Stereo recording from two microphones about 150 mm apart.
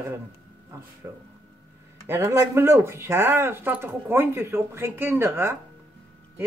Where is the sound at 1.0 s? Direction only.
15° right (ahead or behind).